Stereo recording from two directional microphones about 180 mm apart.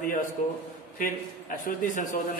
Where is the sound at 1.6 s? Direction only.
45° left (ahead or behind).